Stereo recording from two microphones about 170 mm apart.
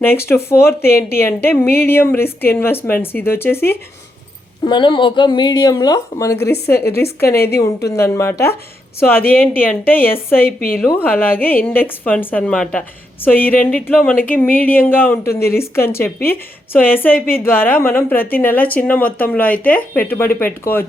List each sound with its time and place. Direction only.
0.0 s speech: 15° left (ahead or behind)
4.6 s speech: 25° left (ahead or behind); by 10.1 s 10° left (ahead or behind)
10.3 s speech: 60° left (ahead or behind)
10.8 s speech: 10° left (ahead or behind)
17.2 s speech: 60° left (ahead or behind)
17.4 s speech: 10° left (ahead or behind)